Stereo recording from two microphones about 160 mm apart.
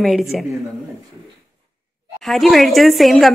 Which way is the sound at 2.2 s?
Centre (ahead or behind).